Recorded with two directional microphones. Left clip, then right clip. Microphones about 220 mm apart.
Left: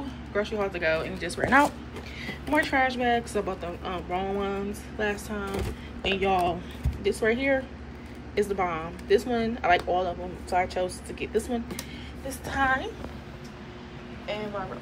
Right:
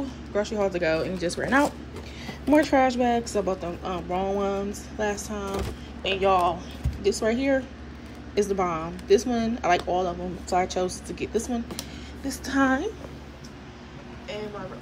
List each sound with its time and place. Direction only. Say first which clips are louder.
0.6 s a woman's voice: right 3 dB; 20° right (ahead or behind)
6.0 s speech: right 3 dB; 5° right (ahead or behind)
7.0 s a woman's voice: right 1 dB; 15° right (ahead or behind)
12.6 s speech: left 1 dB; 30° right (ahead or behind)